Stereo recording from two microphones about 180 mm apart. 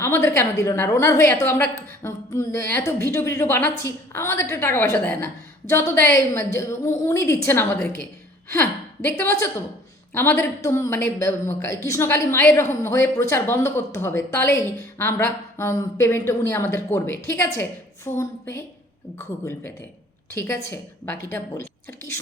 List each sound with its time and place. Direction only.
0.0 s speech: 15° left (ahead or behind)
9.0 s speech: 15° left (ahead or behind)